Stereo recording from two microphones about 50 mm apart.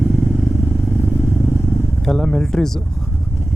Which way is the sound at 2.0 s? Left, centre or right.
Centre.